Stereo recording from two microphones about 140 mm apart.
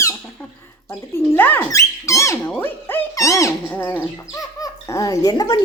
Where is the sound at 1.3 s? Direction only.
15° left (ahead or behind).